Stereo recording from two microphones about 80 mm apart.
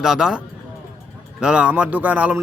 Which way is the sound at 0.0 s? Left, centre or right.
Centre.